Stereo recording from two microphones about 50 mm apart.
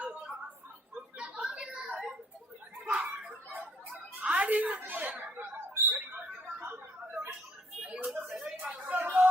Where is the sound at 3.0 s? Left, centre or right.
Right.